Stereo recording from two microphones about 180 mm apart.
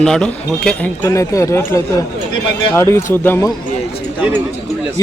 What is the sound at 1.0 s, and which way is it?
Speech, 15° left (ahead or behind).